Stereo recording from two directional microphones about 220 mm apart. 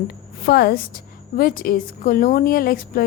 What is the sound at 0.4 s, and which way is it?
A woman's voice, 45° left (ahead or behind).